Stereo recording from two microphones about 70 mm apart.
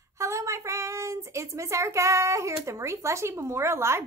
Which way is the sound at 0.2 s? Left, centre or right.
Right.